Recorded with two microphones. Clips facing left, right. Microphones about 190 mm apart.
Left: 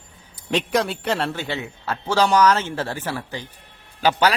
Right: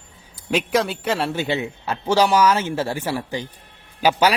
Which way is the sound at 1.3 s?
15° right (ahead or behind).